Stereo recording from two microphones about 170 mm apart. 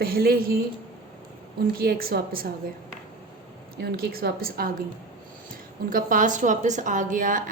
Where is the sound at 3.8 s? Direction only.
70° right (ahead or behind).